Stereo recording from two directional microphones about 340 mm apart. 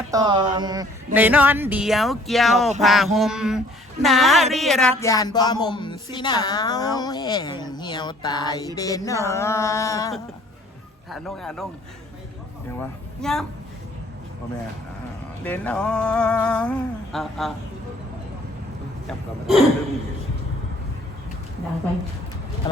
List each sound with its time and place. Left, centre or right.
0.1 s speech: centre
4.5 s a sound: centre
11.1 s speech: centre
12.8 s speech: centre
15.4 s speech: centre
19.0 s speech: centre
22.6 s a sound: centre